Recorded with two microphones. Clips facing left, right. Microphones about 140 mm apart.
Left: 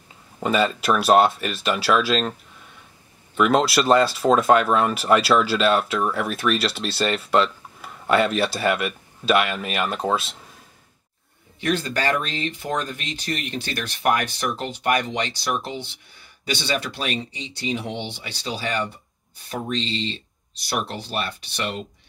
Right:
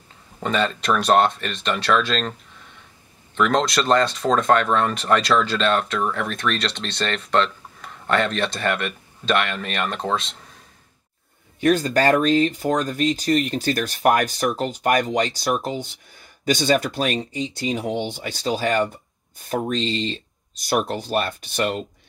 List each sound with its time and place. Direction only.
0.4 s speech: 5° left (ahead or behind)
3.3 s speech: 5° left (ahead or behind)
11.6 s speech: 45° right (ahead or behind)